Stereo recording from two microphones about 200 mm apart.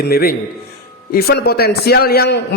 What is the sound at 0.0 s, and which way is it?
A man's voice, 50° left (ahead or behind).